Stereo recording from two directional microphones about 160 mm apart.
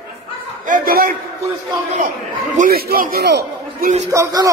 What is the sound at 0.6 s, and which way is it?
Speech, 60° right (ahead or behind).